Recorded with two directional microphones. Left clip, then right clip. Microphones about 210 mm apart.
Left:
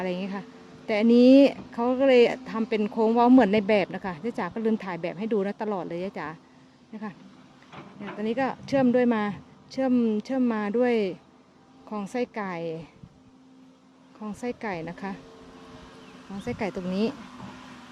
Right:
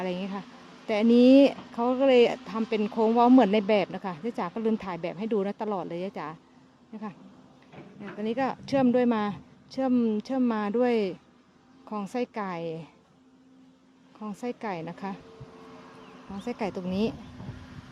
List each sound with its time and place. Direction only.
0.0 s speech: centre (ahead or behind)
7.7 s drawer open or close: 30° left (ahead or behind)
8.2 s speech: 5° right (ahead or behind)
14.2 s speech: 5° right (ahead or behind)
16.5 s speech: 5° right (ahead or behind)
17.4 s vehicle: 35° left (ahead or behind)